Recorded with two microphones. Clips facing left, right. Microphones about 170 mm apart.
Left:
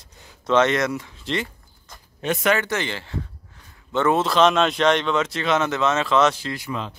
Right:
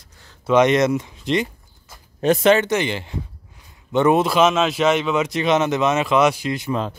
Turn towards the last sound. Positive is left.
turn(degrees=-45)  # may be behind; listen again after turning